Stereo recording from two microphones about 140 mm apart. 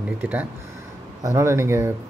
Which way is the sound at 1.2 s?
20° right (ahead or behind).